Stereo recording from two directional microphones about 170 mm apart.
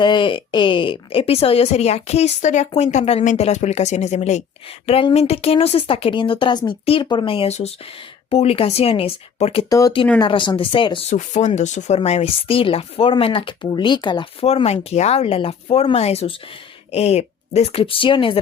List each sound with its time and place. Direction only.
0.0 s speech: 30° left (ahead or behind)
9.6 s speech: 20° left (ahead or behind)
11.1 s speech: 45° left (ahead or behind)